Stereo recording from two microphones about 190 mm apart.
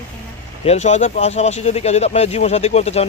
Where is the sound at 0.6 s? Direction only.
35° left (ahead or behind).